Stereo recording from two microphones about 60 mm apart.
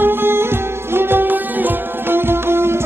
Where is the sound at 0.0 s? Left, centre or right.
Right.